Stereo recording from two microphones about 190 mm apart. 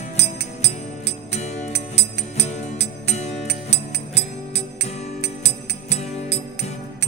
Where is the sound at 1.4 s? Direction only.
35° left (ahead or behind).